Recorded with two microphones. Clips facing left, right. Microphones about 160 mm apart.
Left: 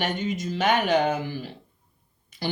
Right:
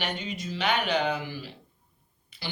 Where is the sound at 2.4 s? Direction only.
50° left (ahead or behind).